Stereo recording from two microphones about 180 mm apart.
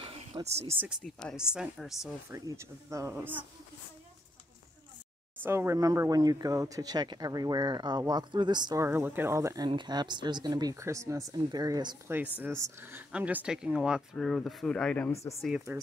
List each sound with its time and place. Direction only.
0.0 s a sound: 30° right (ahead or behind)
0.7 s speech: centre (ahead or behind)
2.2 s speech: 15° right (ahead or behind)
5.4 s speech: 15° right (ahead or behind)
12.1 s speech: 10° right (ahead or behind); by 15.3 s 15° left (ahead or behind)